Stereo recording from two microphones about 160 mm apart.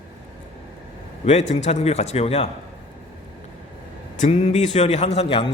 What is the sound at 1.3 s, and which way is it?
A man's voice, 45° left (ahead or behind).